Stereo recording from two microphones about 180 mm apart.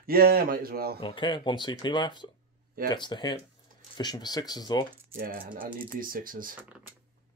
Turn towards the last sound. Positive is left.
turn(degrees=-50)  # may be behind; listen again after turning